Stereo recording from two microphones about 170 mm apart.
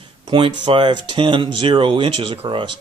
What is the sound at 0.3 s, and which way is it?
Speech, 30° right (ahead or behind).